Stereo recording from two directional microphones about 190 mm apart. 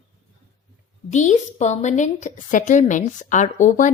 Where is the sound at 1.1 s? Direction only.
40° left (ahead or behind).